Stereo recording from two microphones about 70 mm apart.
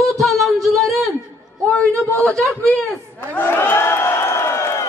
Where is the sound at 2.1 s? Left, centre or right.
Left.